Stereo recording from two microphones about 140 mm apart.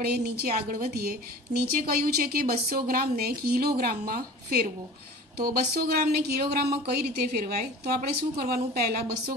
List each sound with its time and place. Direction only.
0.0 s a woman's voice: 90° right